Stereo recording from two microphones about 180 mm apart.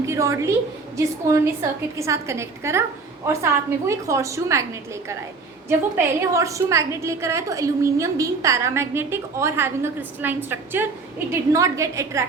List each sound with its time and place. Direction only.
0.0 s a woman's voice: 15° right (ahead or behind)
5.6 s a woman's voice: 15° right (ahead or behind)